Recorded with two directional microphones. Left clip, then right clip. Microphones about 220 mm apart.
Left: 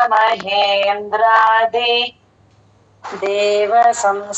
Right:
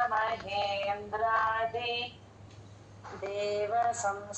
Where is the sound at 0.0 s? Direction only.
40° left (ahead or behind).